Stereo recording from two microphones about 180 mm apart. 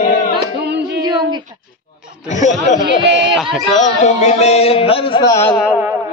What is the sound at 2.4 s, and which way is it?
Speech, 40° left (ahead or behind).